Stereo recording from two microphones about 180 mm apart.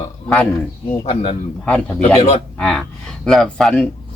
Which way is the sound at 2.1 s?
40° left (ahead or behind).